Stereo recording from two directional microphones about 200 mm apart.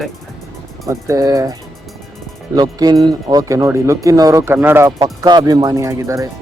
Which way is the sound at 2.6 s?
20° right (ahead or behind).